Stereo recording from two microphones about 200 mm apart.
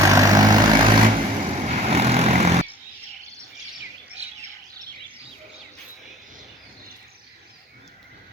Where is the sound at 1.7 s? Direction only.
35° right (ahead or behind).